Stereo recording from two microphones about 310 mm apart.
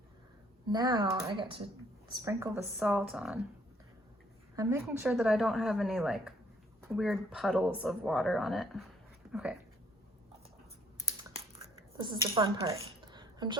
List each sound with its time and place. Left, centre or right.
0.7 s speech: centre
4.5 s speech: centre
11.9 s speech: centre